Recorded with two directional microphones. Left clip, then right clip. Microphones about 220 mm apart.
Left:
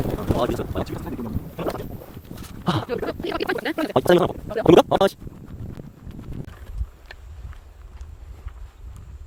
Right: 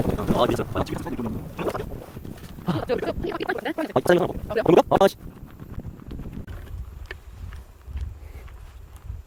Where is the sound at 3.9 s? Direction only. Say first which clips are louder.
Left 2 dB; 15° left (ahead or behind).